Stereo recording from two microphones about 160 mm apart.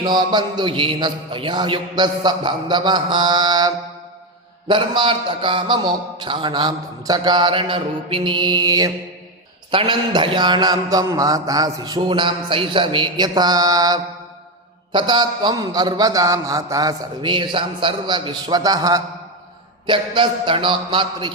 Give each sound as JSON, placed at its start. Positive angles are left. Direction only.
{"t": 0.0, "sound": "a man's voice", "side_deg": -25}
{"t": 4.7, "sound": "a man's voice", "side_deg": -30}